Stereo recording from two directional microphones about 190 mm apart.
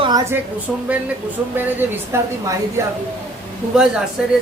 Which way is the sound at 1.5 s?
10° right (ahead or behind).